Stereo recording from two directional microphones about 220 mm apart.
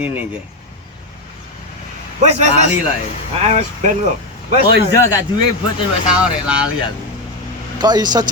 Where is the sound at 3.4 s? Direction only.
30° right (ahead or behind).